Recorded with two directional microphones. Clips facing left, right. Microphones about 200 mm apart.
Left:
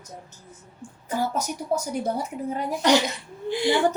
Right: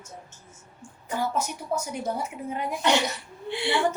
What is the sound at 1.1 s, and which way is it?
A woman's voice, 40° left (ahead or behind).